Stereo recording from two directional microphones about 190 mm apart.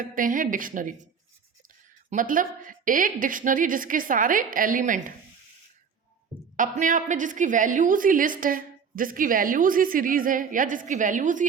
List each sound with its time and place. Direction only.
0.0 s a woman's voice: 45° right (ahead or behind)
2.0 s a woman's voice: 45° right (ahead or behind)
6.6 s a woman's voice: 45° right (ahead or behind)